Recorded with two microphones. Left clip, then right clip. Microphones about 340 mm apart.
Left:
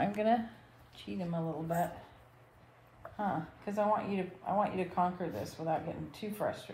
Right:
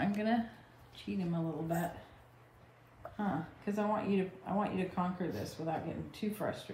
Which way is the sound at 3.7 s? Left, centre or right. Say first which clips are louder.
Left 3 dB; centre.